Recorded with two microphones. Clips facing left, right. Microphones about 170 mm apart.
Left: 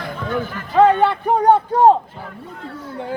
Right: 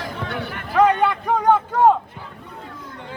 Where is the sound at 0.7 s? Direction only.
30° left (ahead or behind).